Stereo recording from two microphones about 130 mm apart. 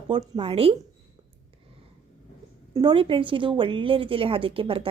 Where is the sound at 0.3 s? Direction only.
45° right (ahead or behind).